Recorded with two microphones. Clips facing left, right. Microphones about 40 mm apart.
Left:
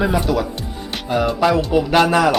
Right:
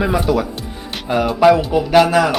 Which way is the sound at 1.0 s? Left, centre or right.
Centre.